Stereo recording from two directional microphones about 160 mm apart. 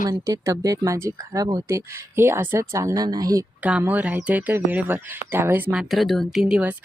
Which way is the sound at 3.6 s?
10° right (ahead or behind).